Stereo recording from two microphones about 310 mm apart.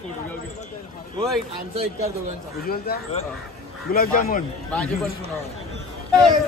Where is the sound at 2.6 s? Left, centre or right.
Left.